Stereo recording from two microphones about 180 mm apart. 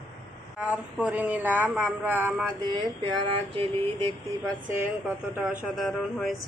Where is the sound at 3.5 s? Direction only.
30° right (ahead or behind).